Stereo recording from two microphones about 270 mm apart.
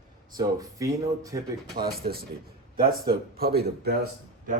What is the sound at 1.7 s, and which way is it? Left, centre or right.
A man's voice, right.